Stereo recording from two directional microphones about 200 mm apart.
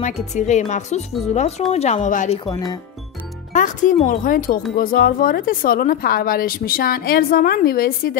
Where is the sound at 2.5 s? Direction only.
20° left (ahead or behind).